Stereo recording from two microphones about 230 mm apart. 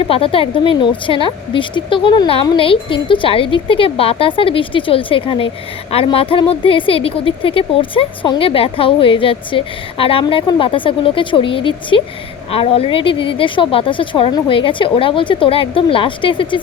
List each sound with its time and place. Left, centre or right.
0.1 s speech: left